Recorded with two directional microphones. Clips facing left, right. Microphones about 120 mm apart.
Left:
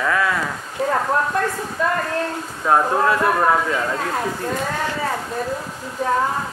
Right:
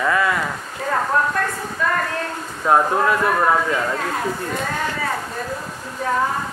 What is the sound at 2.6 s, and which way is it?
A man's voice, centre (ahead or behind).